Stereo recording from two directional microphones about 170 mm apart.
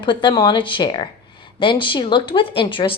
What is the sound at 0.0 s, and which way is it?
Speech, 30° left (ahead or behind).